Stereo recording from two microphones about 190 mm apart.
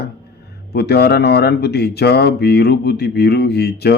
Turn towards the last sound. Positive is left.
turn(degrees=60)  # may be behind; listen again after turning